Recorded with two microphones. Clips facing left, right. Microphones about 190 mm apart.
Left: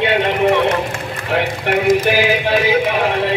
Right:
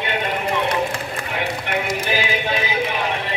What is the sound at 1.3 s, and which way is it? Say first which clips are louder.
Clip-clop: left 8 dB; 65° left (ahead or behind).